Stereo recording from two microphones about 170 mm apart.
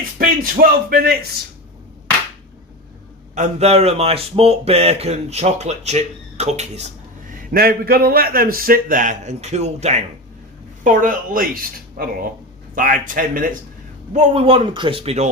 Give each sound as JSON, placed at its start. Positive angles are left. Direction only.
{"t": 0.2, "sound": "a man's voice", "side_deg": -60}
{"t": 3.3, "sound": "speech", "side_deg": -40}
{"t": 7.5, "sound": "a man's voice", "side_deg": -60}
{"t": 10.8, "sound": "a woman's voice", "side_deg": -55}
{"t": 14.1, "sound": "speech", "side_deg": -40}